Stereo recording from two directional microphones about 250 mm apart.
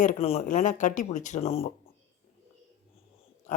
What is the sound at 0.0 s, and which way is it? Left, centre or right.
Speech, left.